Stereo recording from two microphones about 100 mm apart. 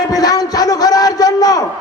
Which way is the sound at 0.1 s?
40° left (ahead or behind).